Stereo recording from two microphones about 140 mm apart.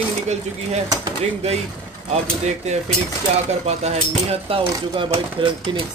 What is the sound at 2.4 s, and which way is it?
Speech, 55° right (ahead or behind).